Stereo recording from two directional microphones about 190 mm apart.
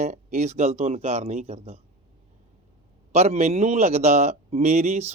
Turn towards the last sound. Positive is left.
turn(degrees=-35)  # may be behind; listen again after turning